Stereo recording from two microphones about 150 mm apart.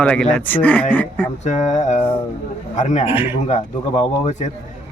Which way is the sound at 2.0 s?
15° left (ahead or behind).